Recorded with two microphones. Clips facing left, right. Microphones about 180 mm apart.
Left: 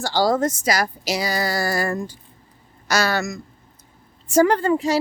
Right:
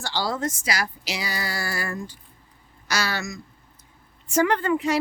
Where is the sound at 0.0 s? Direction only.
40° left (ahead or behind).